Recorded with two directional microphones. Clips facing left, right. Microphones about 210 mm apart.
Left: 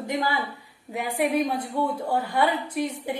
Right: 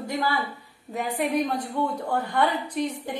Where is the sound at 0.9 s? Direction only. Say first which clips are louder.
Left 1 dB; 10° left (ahead or behind).